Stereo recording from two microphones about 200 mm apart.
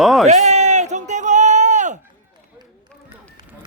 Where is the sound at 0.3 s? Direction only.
35° right (ahead or behind).